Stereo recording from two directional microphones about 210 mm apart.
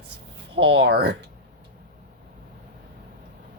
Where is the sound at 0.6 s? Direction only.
60° right (ahead or behind).